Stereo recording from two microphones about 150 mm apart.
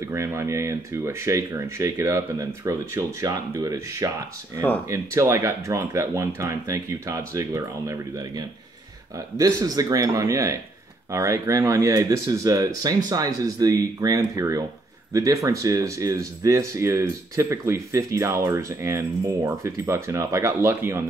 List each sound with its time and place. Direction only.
0.1 s speech: 20° right (ahead or behind)